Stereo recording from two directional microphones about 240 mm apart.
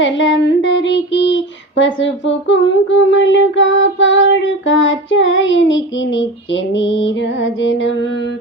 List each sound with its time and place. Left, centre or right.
0.0 s female singing: left